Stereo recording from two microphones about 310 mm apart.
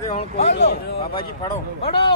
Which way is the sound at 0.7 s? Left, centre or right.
Left.